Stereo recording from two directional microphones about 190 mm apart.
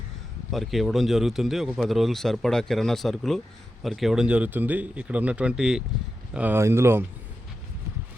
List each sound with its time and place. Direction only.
0.5 s speech: centre (ahead or behind)